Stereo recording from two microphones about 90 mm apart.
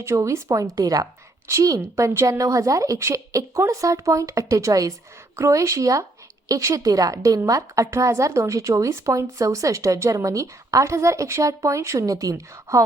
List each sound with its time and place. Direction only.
0.0 s a woman's voice: 35° right (ahead or behind)